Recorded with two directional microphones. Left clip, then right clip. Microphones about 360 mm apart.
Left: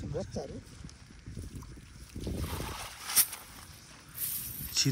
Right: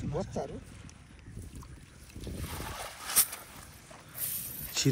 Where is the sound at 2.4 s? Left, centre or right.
Centre.